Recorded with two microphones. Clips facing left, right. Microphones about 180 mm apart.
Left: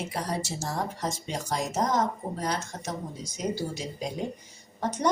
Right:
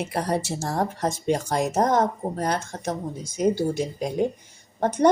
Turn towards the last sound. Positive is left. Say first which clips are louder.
# right 8 dB
turn(degrees=-55)  # may be behind; listen again after turning